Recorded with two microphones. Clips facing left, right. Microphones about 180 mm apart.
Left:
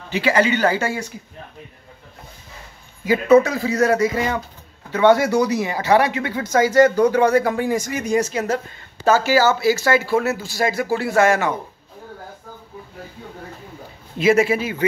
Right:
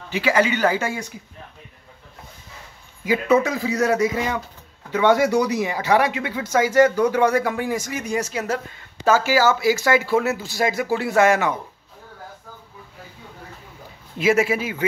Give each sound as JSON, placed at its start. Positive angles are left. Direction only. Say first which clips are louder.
{"t": 0.1, "sound": "speech", "louder": "left 2 dB", "side_deg": -5}
{"t": 3.4, "sound": "speech", "louder": "left 2 dB", "side_deg": -15}
{"t": 14.1, "sound": "speech", "louder": "left 3 dB", "side_deg": -5}